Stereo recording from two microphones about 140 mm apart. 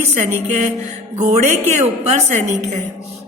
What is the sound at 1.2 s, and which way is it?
A woman's voice, 55° right (ahead or behind).